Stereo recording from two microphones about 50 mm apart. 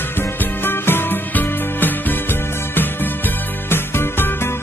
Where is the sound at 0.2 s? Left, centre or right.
Left.